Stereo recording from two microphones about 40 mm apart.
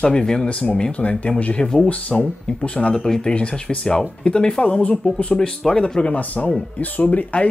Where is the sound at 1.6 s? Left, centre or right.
Centre.